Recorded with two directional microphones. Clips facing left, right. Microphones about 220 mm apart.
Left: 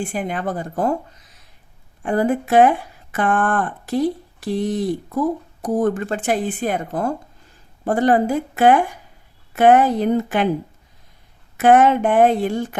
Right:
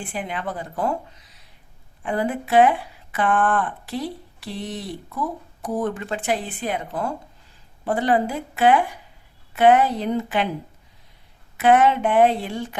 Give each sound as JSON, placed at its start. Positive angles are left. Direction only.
{"t": 0.0, "sound": "speech", "side_deg": 45}
{"t": 11.5, "sound": "speech", "side_deg": 50}